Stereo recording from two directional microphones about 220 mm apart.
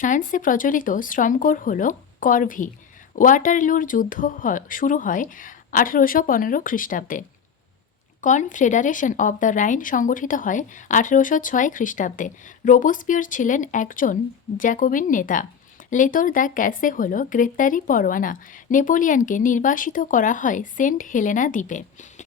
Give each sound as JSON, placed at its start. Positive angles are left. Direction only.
{"t": 0.0, "sound": "speech", "side_deg": 35}